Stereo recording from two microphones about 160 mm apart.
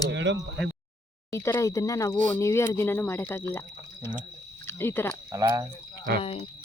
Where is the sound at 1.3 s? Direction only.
15° left (ahead or behind).